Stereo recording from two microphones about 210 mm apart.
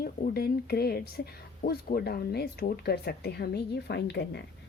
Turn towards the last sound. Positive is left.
turn(degrees=50)  # may be behind; listen again after turning